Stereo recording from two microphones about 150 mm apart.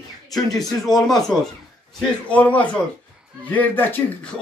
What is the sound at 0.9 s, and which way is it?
Speech, 25° left (ahead or behind).